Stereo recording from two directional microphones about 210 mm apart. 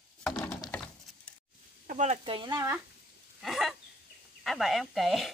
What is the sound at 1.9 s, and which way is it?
Sizzle, 35° right (ahead or behind).